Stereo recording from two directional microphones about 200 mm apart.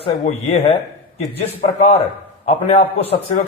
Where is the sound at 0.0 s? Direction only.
30° left (ahead or behind).